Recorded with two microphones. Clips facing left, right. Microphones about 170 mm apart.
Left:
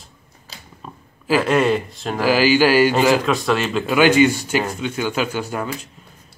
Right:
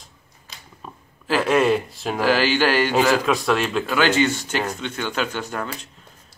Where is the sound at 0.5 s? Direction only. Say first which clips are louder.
Left 3 dB; 35° left (ahead or behind).